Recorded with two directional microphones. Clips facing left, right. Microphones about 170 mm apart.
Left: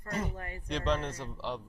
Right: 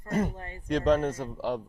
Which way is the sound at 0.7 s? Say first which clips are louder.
Right 8 dB; 45° right (ahead or behind).